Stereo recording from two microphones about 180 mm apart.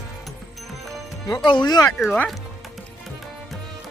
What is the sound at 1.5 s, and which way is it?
Speech, 25° left (ahead or behind).